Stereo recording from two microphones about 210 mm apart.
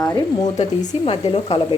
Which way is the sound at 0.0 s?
15° left (ahead or behind).